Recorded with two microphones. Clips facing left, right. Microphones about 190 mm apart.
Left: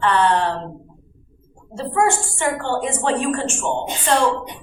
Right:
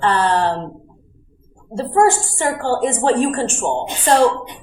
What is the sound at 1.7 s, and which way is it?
A woman's voice, 40° right (ahead or behind).